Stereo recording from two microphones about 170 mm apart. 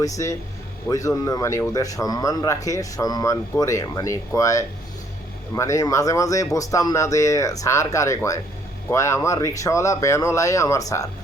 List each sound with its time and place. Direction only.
0.0 s speech: 20° left (ahead or behind)